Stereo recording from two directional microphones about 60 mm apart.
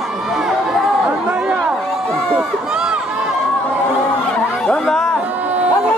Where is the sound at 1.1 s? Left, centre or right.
Right.